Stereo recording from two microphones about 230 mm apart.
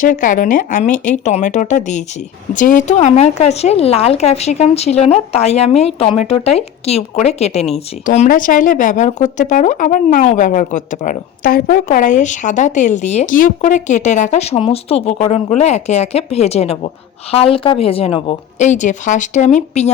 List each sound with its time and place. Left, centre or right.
0.0 s speech: left